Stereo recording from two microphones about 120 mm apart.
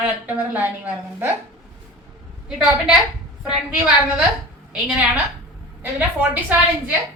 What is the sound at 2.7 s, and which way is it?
Speech, 5° right (ahead or behind).